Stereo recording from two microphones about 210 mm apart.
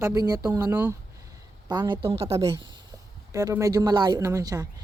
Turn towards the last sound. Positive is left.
turn(degrees=-15)  # may be behind; listen again after turning